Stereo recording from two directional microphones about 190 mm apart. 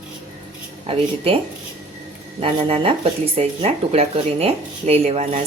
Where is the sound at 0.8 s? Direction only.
30° right (ahead or behind).